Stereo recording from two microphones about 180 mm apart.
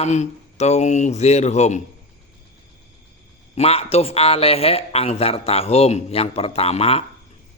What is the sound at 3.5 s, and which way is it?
A man's voice, 35° left (ahead or behind).